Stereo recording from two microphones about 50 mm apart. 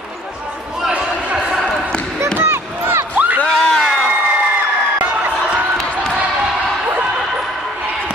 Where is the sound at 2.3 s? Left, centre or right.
Right.